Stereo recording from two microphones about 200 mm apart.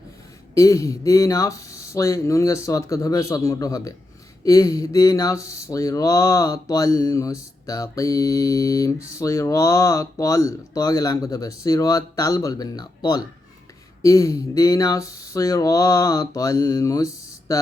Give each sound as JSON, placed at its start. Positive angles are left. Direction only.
{"t": 0.5, "sound": "speech", "side_deg": 15}